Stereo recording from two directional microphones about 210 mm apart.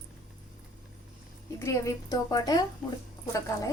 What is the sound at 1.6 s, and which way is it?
A woman's voice, 15° left (ahead or behind).